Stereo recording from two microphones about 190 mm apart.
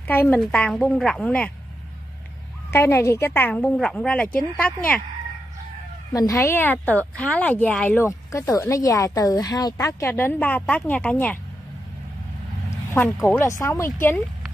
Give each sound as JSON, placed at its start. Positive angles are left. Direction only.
{"t": 0.0, "sound": "a woman's voice", "side_deg": 10}
{"t": 2.7, "sound": "a woman's voice", "side_deg": 15}
{"t": 6.1, "sound": "a woman's voice", "side_deg": 15}
{"t": 12.6, "sound": "a woman's voice", "side_deg": 15}